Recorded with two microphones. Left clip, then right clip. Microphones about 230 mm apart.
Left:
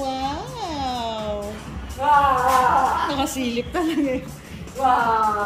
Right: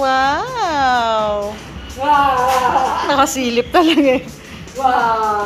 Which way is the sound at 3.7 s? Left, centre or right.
Right.